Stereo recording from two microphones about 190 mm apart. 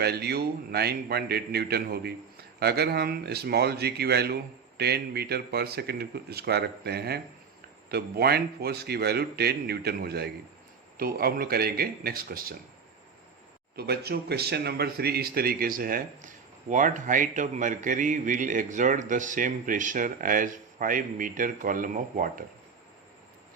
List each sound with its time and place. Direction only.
0.0 s a man's voice: 55° right (ahead or behind)
13.7 s a man's voice: 55° right (ahead or behind)